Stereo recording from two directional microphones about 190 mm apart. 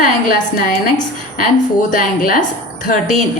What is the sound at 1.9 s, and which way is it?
Speech, 45° left (ahead or behind).